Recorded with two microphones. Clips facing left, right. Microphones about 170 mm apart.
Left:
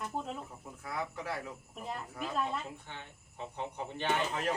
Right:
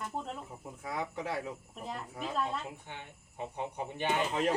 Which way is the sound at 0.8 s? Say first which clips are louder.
Right 2 dB; 20° right (ahead or behind).